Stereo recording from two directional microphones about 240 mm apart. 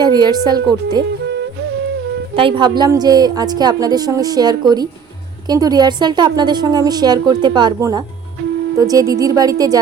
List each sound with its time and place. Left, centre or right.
0.0 s a woman's voice: centre
2.3 s a woman's voice: right